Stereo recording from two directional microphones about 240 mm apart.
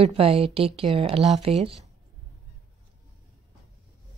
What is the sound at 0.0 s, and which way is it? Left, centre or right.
Speech, right.